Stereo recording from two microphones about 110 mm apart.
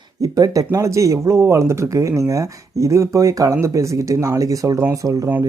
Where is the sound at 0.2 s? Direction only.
35° right (ahead or behind).